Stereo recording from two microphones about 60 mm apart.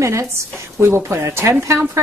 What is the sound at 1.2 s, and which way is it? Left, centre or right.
Speech, right.